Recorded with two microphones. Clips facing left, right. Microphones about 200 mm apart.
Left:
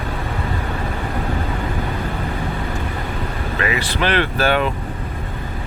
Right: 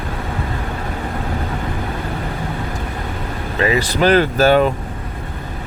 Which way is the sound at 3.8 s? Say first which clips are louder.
Right 7 dB; 40° right (ahead or behind).